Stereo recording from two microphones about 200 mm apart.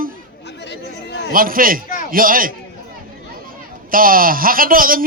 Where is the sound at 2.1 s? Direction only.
45° right (ahead or behind).